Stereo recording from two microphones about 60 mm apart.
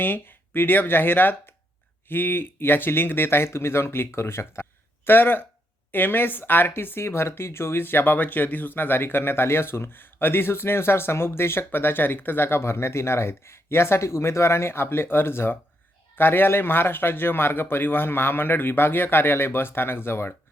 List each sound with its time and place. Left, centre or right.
0.0 s speech: left
5.0 s speech: left